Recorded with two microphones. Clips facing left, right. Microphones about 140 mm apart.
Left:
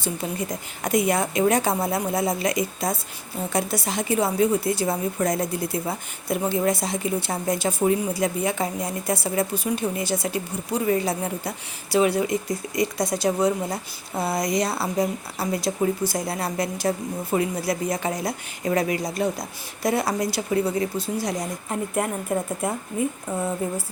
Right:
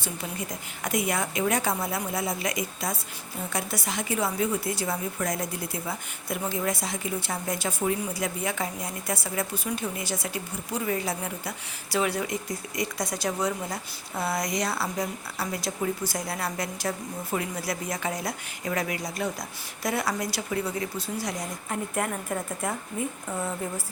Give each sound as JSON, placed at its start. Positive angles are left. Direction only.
{"t": 0.8, "sound": "a woman's voice", "side_deg": 35}
{"t": 11.9, "sound": "a woman's voice", "side_deg": 25}